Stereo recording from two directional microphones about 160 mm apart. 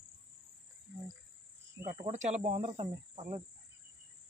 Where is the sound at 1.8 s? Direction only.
50° right (ahead or behind).